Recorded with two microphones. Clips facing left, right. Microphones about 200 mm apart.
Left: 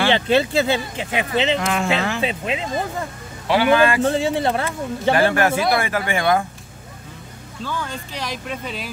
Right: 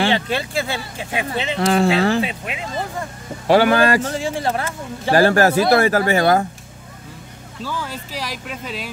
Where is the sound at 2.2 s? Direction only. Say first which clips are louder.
Left 4 dB; 25° left (ahead or behind).